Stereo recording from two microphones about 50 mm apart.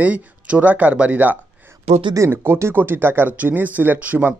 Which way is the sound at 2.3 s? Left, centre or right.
Right.